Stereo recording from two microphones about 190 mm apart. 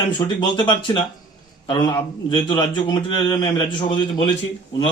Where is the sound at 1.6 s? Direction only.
25° left (ahead or behind).